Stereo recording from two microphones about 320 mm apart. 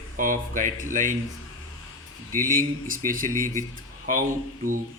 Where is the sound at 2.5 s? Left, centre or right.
Right.